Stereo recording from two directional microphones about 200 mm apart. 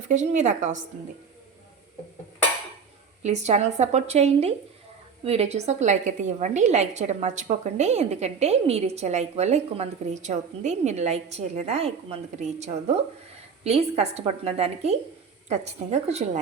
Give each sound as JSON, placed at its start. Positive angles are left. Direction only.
{"t": 0.1, "sound": "a woman's voice", "side_deg": -35}
{"t": 3.2, "sound": "a woman's voice", "side_deg": -35}